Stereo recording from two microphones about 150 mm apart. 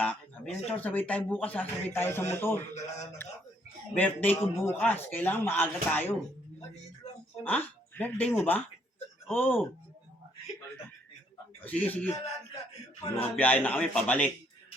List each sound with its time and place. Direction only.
0.0 s a sound: 10° left (ahead or behind)
0.8 s speech: 10° left (ahead or behind)
7.4 s speech: 10° left (ahead or behind)
11.6 s speech: 10° left (ahead or behind)
13.1 s speech: 10° left (ahead or behind)